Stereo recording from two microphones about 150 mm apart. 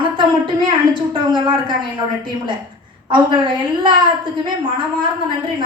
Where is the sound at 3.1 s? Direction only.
30° right (ahead or behind).